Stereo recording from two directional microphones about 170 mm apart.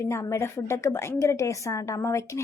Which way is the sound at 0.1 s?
15° left (ahead or behind).